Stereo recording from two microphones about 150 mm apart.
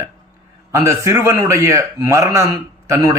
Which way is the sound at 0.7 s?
20° right (ahead or behind).